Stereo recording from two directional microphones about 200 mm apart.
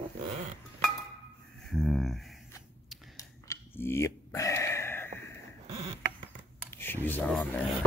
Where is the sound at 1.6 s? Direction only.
Centre (ahead or behind).